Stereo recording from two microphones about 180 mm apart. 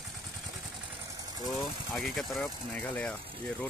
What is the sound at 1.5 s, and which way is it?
Speech, centre (ahead or behind).